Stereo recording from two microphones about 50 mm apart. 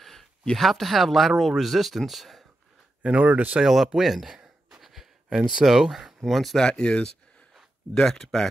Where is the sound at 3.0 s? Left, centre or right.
Right.